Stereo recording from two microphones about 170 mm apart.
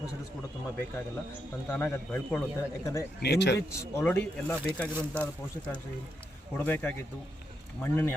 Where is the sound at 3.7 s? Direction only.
15° left (ahead or behind).